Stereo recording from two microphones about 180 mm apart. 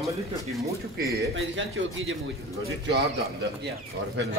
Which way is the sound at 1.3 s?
90° right.